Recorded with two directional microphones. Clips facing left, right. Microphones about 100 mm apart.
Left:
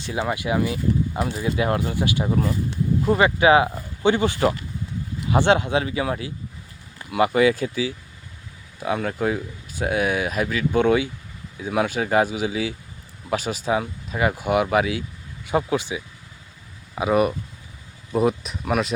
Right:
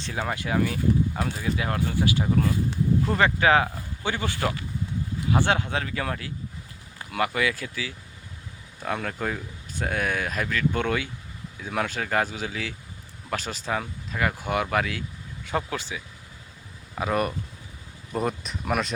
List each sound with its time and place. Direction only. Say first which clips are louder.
0.0 s speech: left 4 dB; 10° left (ahead or behind)
8.8 s speech: left 6 dB; 5° left (ahead or behind)